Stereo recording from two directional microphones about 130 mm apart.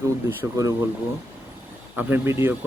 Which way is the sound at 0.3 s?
25° right (ahead or behind).